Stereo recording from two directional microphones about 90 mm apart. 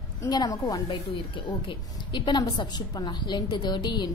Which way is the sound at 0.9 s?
60° left (ahead or behind).